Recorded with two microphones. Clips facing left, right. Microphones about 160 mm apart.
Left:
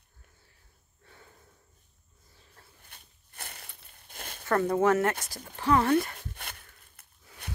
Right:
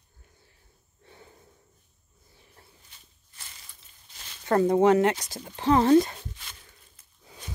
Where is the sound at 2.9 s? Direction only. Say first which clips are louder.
Left 3 dB; 60° left (ahead or behind).